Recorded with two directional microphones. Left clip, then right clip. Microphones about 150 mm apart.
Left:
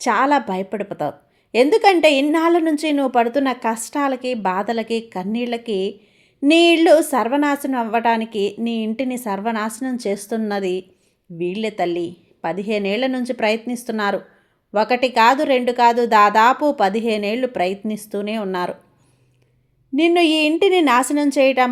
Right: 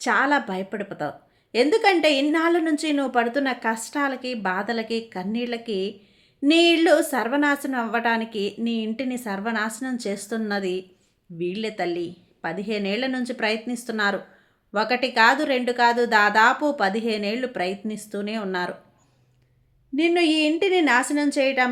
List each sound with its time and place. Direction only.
0.0 s a woman's voice: 25° left (ahead or behind)
20.0 s a woman's voice: 30° left (ahead or behind)